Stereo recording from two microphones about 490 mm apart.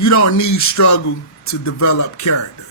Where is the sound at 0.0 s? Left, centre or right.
Left.